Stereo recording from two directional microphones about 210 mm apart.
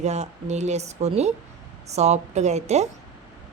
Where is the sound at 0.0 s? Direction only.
30° right (ahead or behind).